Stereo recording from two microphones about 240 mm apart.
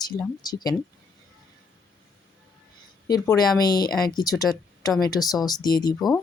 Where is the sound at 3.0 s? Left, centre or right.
Centre.